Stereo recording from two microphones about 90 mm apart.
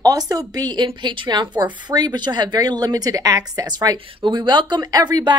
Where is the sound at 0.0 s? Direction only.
45° right (ahead or behind).